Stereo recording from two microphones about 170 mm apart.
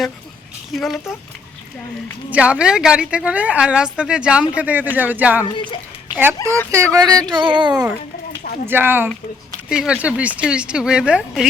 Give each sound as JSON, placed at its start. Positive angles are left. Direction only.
{"t": 0.7, "sound": "a woman's voice", "side_deg": 0}
{"t": 2.3, "sound": "a woman's voice", "side_deg": -5}
{"t": 6.7, "sound": "speech", "side_deg": -15}
{"t": 7.7, "sound": "speech", "side_deg": -5}